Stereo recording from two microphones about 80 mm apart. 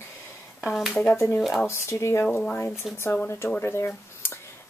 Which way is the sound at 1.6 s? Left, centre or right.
Left.